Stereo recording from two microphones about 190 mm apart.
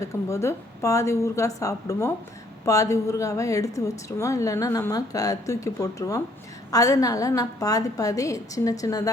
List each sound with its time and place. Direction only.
0.0 s a woman's voice: 15° left (ahead or behind)